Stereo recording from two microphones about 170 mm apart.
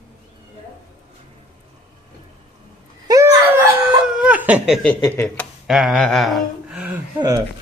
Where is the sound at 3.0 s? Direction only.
20° right (ahead or behind); by 4.9 s centre (ahead or behind).